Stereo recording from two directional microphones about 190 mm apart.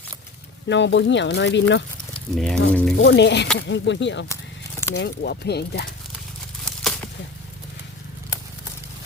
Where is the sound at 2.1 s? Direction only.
5° left (ahead or behind).